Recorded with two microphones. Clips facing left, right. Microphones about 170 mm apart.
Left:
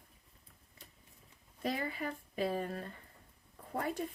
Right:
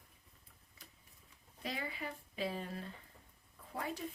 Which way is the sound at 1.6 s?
45° left (ahead or behind).